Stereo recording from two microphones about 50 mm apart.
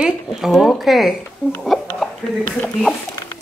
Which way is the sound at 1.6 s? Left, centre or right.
Centre.